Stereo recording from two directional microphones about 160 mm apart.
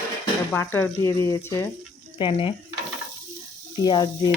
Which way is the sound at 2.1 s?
35° left (ahead or behind).